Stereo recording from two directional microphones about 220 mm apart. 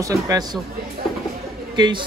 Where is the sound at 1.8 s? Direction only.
20° right (ahead or behind).